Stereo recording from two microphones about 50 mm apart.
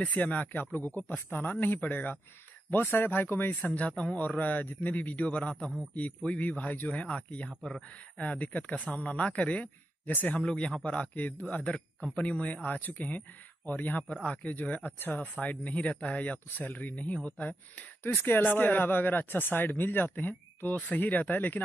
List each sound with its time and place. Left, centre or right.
0.0 s speech: left
3.7 s speech: left
10.4 s speech: left
18.0 s speech: left